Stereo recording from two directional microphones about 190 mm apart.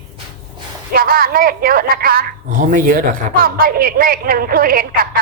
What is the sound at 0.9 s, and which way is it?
A woman's voice, 50° right (ahead or behind).